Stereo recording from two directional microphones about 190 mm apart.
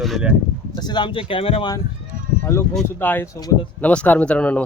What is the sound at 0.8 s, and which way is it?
Speech, 25° left (ahead or behind).